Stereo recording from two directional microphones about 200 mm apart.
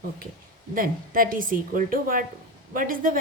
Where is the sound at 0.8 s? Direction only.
45° right (ahead or behind).